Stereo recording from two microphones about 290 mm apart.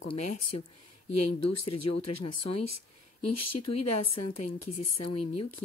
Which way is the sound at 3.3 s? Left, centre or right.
Left.